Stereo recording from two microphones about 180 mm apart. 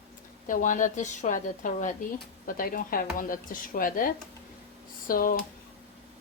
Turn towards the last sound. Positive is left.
turn(degrees=50)  # may be behind; listen again after turning